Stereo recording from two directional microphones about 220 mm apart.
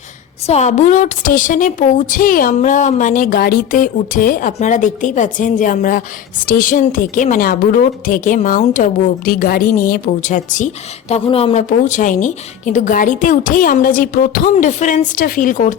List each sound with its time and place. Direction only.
0.4 s a woman's voice: 30° left (ahead or behind)